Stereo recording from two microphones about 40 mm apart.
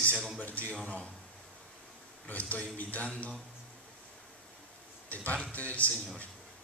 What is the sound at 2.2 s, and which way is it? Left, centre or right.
Speech, left.